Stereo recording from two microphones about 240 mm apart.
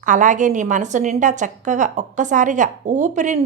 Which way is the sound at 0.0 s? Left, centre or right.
Right.